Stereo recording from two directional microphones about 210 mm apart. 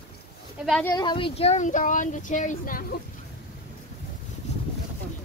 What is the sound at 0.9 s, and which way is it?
Speech, 20° left (ahead or behind).